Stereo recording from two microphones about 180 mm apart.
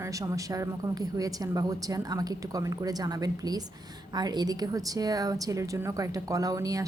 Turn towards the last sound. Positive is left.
turn(degrees=-20)  # may be behind; listen again after turning